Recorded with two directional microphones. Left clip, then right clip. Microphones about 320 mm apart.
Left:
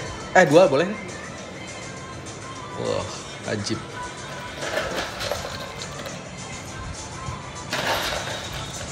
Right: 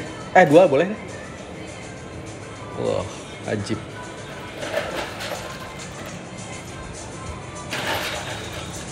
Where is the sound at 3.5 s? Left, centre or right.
Centre.